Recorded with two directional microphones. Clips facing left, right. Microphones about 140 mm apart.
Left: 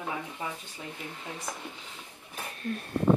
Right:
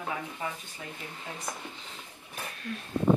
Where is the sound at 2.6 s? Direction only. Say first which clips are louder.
Left 6 dB; 45° left (ahead or behind).